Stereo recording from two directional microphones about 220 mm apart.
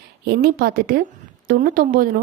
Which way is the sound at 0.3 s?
45° right (ahead or behind).